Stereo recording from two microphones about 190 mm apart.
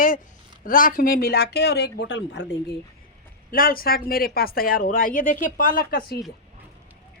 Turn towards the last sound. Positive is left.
turn(degrees=50)  # may be behind; listen again after turning